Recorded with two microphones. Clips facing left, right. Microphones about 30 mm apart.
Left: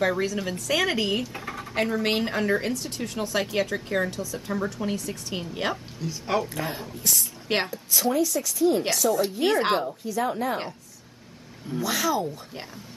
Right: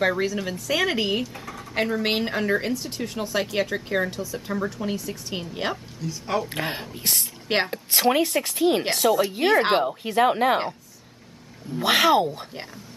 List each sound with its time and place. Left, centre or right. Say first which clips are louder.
0.0 s a woman's voice: right 2 dB; centre
1.3 s a sound: left 2 dB; centre
1.8 s a woman's voice: right 1 dB; centre
6.5 s speech: right 2 dB; right
9.4 s speech: right 3 dB; centre
9.8 s speech: right 6 dB; right
11.8 s speech: right 7 dB; right